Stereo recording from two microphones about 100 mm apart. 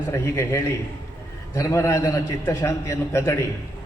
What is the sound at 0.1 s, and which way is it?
A man's voice, 30° left (ahead or behind).